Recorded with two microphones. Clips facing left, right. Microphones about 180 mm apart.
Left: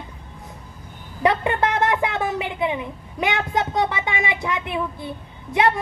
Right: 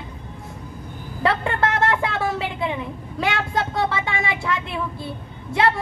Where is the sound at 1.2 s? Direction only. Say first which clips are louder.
Left 2 dB; 20° left (ahead or behind).